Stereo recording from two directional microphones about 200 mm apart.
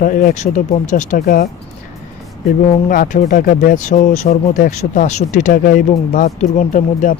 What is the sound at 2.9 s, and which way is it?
Speech, 40° left (ahead or behind).